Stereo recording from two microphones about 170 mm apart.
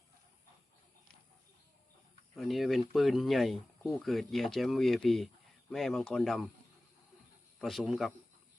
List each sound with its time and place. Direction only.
2.3 s speech: centre (ahead or behind)
7.6 s speech: centre (ahead or behind)